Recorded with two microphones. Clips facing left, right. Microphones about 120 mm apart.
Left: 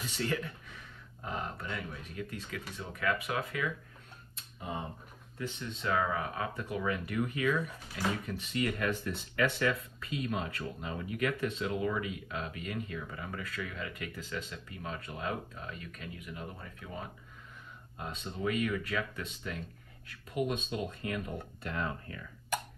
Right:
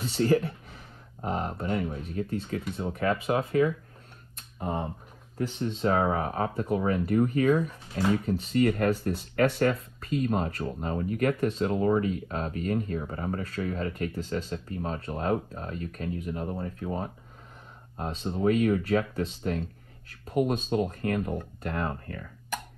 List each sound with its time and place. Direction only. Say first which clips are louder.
0.0 s speech: right 10 dB; 35° right (ahead or behind)
4.4 s tick-tock: right 8 dB; 50° right (ahead or behind)
5.5 s speech: right 7 dB; 35° right (ahead or behind)